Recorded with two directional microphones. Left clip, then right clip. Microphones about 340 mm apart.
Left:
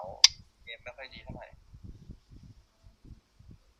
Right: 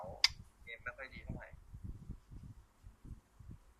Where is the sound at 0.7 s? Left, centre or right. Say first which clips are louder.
Left 3 dB; centre.